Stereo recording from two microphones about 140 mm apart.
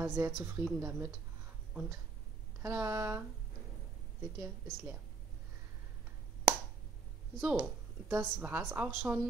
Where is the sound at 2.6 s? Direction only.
20° right (ahead or behind).